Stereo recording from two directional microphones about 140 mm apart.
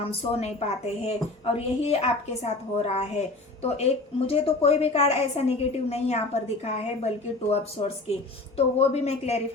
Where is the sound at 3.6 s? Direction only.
50° left (ahead or behind).